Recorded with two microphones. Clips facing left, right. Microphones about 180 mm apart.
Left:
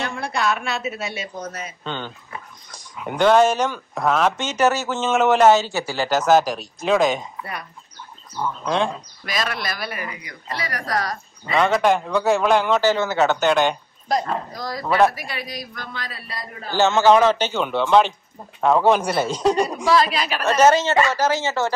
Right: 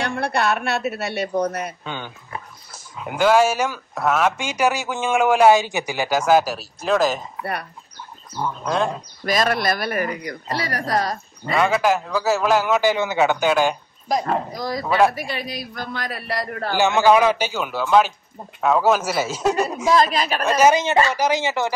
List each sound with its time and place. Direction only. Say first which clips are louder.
0.0 s speech: right 2 dB; 60° right (ahead or behind)
1.9 s speech: left 1 dB; 10° right (ahead or behind)
8.6 s a man's voice: even; 5° right (ahead or behind)
9.2 s speech: right 7 dB; 50° right (ahead or behind); by 11.1 s 25° right (ahead or behind)
11.5 s a man's voice: left 1 dB; 5° right (ahead or behind)
14.5 s speech: right 3 dB; 15° right (ahead or behind)
15.1 s speech: right 3 dB; 25° right (ahead or behind); by 16.7 s 65° right (ahead or behind)
16.7 s a man's voice: left 1 dB; 15° right (ahead or behind)
19.8 s speech: right 1 dB; 45° right (ahead or behind)
20.4 s speech: left 1 dB; 10° right (ahead or behind)